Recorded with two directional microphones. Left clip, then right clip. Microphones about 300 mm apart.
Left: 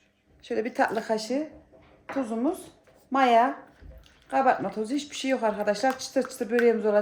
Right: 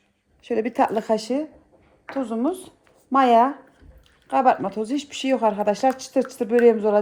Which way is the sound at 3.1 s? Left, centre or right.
Right.